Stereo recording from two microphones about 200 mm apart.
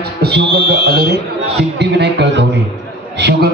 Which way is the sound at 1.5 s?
60° right (ahead or behind).